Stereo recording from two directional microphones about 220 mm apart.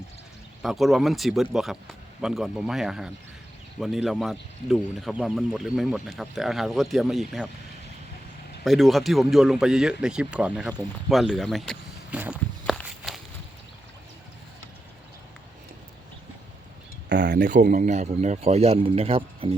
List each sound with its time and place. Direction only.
0.6 s speech: centre (ahead or behind)
8.6 s speech: centre (ahead or behind)
12.2 s walk: 5° right (ahead or behind)
17.1 s a sound: 55° right (ahead or behind)
17.5 s a man's voice: 35° right (ahead or behind)